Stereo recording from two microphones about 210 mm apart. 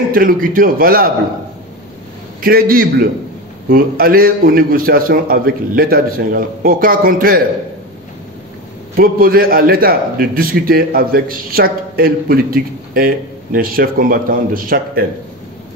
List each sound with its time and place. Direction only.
0.1 s a man's voice: 45° right (ahead or behind)
2.4 s a man's voice: 45° right (ahead or behind)
8.9 s a man's voice: 45° right (ahead or behind)